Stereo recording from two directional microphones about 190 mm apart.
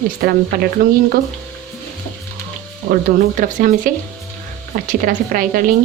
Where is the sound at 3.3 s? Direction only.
45° right (ahead or behind).